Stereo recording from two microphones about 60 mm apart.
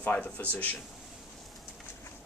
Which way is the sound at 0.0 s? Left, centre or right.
Left.